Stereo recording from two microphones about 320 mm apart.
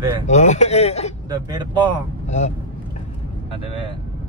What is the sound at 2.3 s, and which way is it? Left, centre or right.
Speech, left.